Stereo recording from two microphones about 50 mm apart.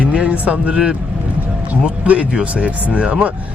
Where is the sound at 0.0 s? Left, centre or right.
Right.